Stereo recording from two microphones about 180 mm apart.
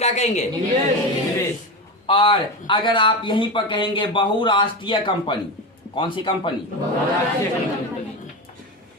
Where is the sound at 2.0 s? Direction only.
25° left (ahead or behind).